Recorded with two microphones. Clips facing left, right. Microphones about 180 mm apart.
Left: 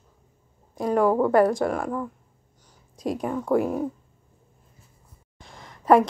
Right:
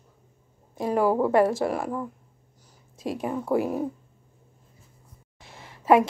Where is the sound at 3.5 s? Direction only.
5° right (ahead or behind).